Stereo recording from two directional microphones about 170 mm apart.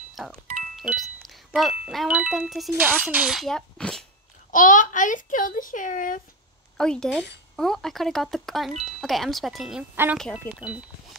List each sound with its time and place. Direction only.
0.1 s music: centre (ahead or behind)
0.7 s speech: centre (ahead or behind)
4.5 s a child's voice: 50° left (ahead or behind)
6.8 s speech: 5° left (ahead or behind)